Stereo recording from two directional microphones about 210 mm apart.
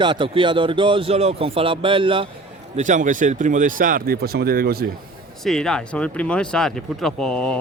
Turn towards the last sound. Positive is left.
turn(degrees=5)  # may be behind; listen again after turning